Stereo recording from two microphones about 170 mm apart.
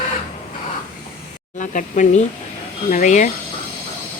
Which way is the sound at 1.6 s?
50° left (ahead or behind).